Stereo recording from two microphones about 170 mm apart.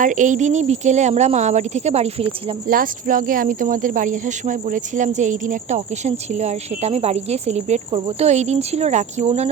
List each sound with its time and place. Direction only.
0.0 s speech: 50° right (ahead or behind)
2.6 s speech: 55° right (ahead or behind)